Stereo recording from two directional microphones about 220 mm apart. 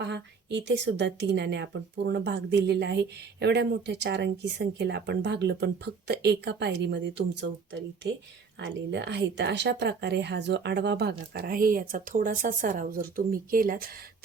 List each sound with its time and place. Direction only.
0.0 s a woman's voice: 50° right (ahead or behind)
8.6 s a woman's voice: 50° right (ahead or behind)